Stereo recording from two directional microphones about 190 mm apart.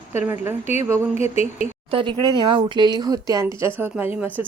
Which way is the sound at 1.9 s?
25° right (ahead or behind).